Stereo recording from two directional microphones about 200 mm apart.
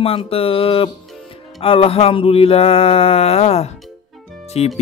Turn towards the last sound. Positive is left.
turn(degrees=30)  # may be behind; listen again after turning